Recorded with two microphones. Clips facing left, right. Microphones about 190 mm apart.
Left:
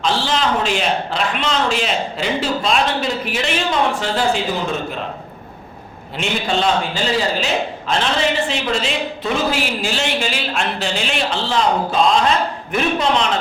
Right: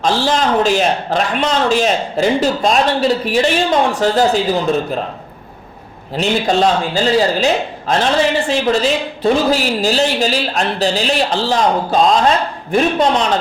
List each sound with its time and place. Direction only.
0.0 s a man's voice: 45° right (ahead or behind)
6.1 s a man's voice: 40° right (ahead or behind)